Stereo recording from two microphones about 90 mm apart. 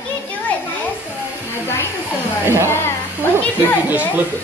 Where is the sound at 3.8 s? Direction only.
20° right (ahead or behind).